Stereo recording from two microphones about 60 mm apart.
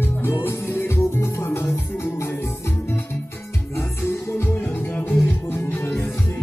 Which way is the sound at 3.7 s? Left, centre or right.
Left.